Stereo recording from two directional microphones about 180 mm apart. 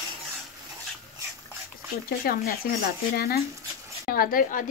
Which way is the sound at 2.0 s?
55° left (ahead or behind).